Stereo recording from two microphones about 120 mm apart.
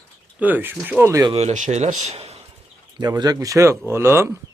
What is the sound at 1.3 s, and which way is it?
Speech, 65° right (ahead or behind).